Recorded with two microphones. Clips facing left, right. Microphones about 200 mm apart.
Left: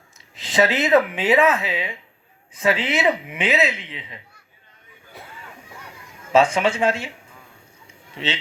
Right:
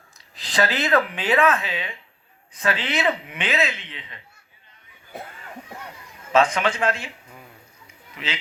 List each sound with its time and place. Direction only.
0.3 s speech: 25° left (ahead or behind)
6.3 s speech: 30° left (ahead or behind)
8.1 s speech: 30° left (ahead or behind)